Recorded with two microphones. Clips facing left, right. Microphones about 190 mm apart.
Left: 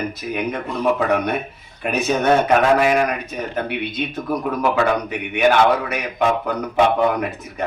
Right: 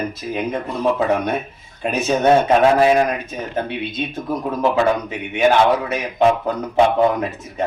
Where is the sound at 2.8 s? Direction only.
30° right (ahead or behind).